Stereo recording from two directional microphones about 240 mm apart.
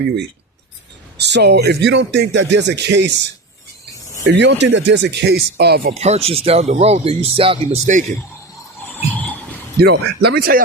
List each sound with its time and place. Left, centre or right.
1.2 s speech: right
5.9 s speech: right
9.1 s a sound: centre
9.8 s speech: right